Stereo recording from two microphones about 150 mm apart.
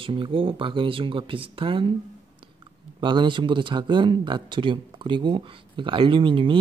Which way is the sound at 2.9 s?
30° right (ahead or behind).